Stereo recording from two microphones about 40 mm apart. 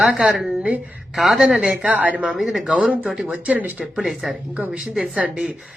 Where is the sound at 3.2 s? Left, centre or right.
Right.